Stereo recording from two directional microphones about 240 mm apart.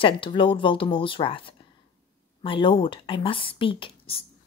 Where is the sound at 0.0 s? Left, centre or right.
Left.